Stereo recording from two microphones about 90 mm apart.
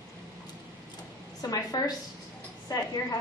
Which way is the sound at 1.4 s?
40° left (ahead or behind).